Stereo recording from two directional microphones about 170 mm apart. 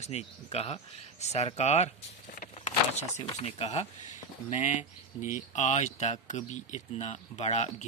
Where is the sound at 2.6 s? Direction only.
40° left (ahead or behind).